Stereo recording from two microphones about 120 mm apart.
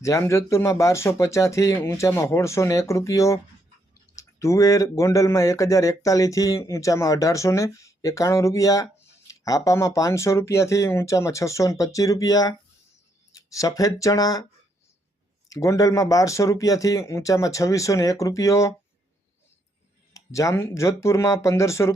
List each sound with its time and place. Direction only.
0.0 s speech: 25° left (ahead or behind)
15.4 s speech: 30° left (ahead or behind)
20.1 s speech: 25° left (ahead or behind)